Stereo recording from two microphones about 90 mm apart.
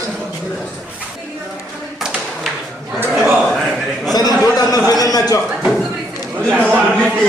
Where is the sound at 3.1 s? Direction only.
20° right (ahead or behind).